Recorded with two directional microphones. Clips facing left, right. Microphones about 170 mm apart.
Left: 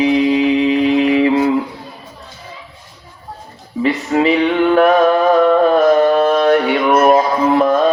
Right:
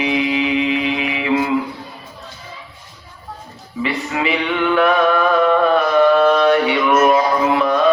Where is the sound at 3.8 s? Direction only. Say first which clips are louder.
Left 7 dB; 40° left (ahead or behind).